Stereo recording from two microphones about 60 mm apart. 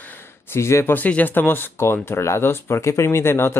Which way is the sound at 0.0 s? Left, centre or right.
Left.